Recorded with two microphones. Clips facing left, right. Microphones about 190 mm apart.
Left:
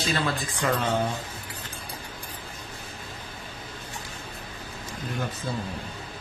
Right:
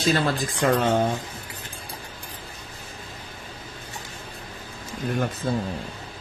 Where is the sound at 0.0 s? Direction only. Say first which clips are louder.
Right 5 dB; 40° right (ahead or behind).